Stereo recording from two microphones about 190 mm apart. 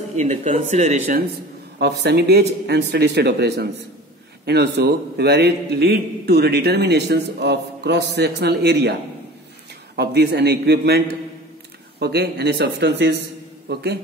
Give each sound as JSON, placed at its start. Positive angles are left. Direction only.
{"t": 0.1, "sound": "speech", "side_deg": -35}
{"t": 1.8, "sound": "a man's voice", "side_deg": -60}
{"t": 9.9, "sound": "a man's voice", "side_deg": -60}
{"t": 12.0, "sound": "a man's voice", "side_deg": -60}